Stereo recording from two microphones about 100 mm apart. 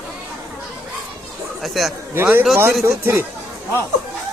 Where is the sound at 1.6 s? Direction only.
Centre (ahead or behind).